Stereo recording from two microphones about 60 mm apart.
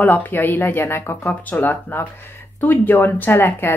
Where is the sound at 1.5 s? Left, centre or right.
Left.